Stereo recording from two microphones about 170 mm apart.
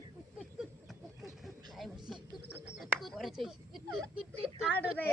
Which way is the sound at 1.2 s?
Centre (ahead or behind).